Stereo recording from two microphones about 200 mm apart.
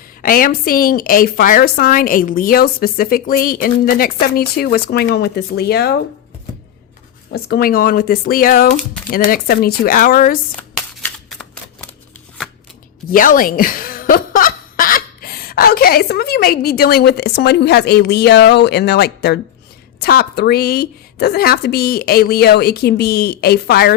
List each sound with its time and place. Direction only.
0.2 s a woman's voice: 45° left (ahead or behind)
7.3 s a woman's voice: 50° left (ahead or behind)
10.6 s shuffling cards: 5° left (ahead or behind)
13.1 s a woman's voice: 45° left (ahead or behind)